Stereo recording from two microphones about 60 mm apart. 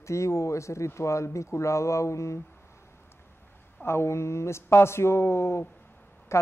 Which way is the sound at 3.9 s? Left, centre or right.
Left.